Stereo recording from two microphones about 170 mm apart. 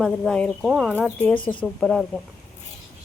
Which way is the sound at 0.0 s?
5° left (ahead or behind).